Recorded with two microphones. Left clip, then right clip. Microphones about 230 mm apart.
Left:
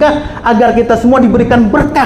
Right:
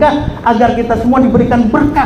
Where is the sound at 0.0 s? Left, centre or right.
Left.